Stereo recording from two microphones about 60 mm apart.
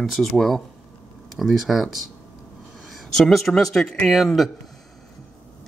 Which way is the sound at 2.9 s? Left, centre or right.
Centre.